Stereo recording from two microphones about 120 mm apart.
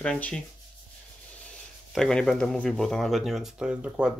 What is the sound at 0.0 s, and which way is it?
Speech, 10° left (ahead or behind).